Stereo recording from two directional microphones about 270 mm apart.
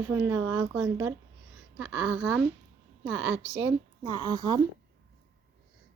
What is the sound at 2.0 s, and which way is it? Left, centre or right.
Speech, right.